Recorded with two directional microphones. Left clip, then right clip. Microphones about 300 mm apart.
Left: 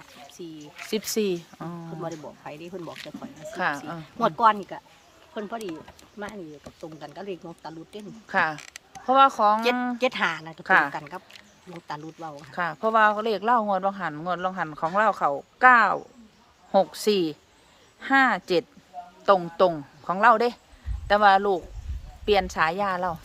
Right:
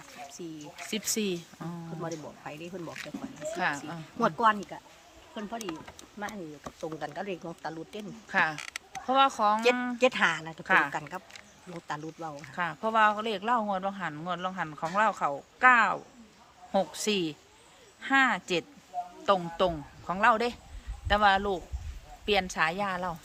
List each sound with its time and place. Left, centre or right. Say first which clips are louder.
0.4 s speech: left 3 dB; centre
0.9 s speech: left 6 dB; centre
2.0 s speech: left 2 dB; centre
3.5 s speech: left 4 dB; centre
7.0 s speech: left 2 dB; centre
8.3 s speech: left 3 dB; centre
10.0 s speech: even; centre
10.6 s speech: left 5 dB; centre
10.9 s speech: left 1 dB; centre
12.5 s speech: left 5 dB; centre